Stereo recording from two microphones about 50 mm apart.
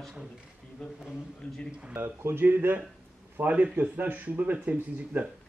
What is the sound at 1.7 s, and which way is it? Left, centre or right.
Speech, centre.